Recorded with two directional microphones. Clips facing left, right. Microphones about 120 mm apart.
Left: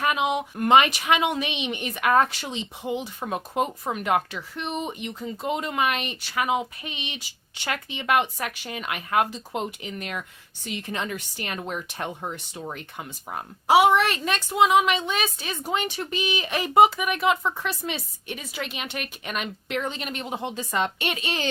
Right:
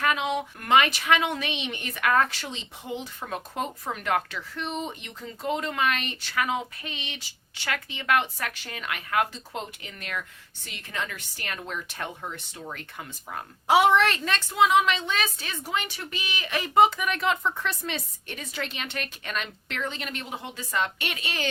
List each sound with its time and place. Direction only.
0.0 s a woman's voice: 15° left (ahead or behind)
13.7 s a woman's voice: 10° left (ahead or behind); by 21.5 s 25° left (ahead or behind)